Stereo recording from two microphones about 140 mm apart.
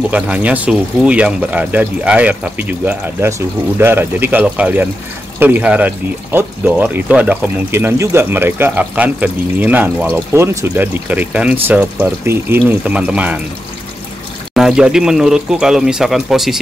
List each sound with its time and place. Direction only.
0.1 s speech: 10° right (ahead or behind)
14.5 s speech: 5° right (ahead or behind)